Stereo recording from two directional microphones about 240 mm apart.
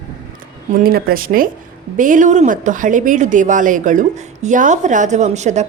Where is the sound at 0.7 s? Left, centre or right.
Right.